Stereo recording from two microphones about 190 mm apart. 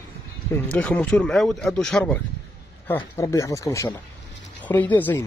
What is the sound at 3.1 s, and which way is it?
Speech, 15° left (ahead or behind).